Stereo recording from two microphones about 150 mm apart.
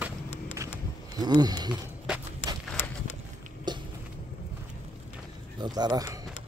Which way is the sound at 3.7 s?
30° right (ahead or behind).